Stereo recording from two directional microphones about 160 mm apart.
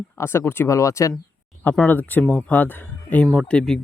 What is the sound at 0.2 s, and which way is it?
Speech, 15° left (ahead or behind).